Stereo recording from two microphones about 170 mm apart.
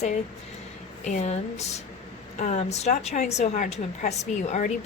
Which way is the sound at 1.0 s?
45° left (ahead or behind).